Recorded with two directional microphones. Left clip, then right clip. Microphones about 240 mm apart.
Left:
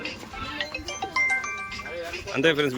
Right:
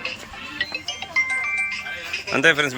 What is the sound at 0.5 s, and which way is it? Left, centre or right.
Music, left.